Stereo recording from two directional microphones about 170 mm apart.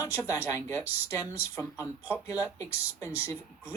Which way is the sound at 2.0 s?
10° right (ahead or behind).